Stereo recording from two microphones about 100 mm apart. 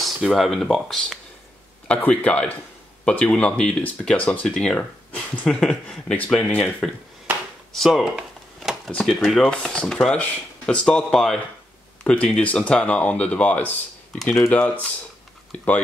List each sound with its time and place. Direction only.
0.0 s speech: centre (ahead or behind)
1.9 s speech: 15° left (ahead or behind)
4.7 s a sound: 15° left (ahead or behind)
5.4 s speech: 5° left (ahead or behind)
7.7 s a sound: centre (ahead or behind)
8.9 s speech: 5° left (ahead or behind)
14.1 s speech: 5° left (ahead or behind)
14.5 s speech: 15° left (ahead or behind)